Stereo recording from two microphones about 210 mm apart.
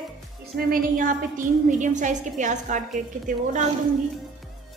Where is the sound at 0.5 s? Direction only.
40° right (ahead or behind).